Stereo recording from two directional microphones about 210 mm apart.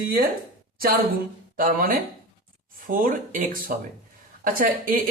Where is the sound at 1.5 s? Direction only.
40° right (ahead or behind).